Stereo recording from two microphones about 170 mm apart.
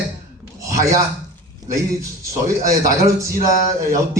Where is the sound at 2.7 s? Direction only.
20° right (ahead or behind).